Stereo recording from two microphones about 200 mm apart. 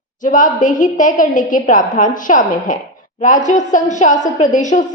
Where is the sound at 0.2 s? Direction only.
40° left (ahead or behind).